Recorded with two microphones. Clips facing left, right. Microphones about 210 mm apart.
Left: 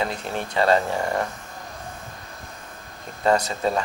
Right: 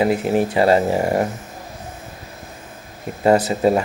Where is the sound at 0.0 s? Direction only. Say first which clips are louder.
Right 10 dB; 10° right (ahead or behind).